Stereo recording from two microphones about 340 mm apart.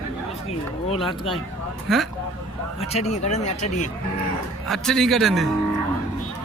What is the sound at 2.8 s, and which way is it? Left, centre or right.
Speech, centre.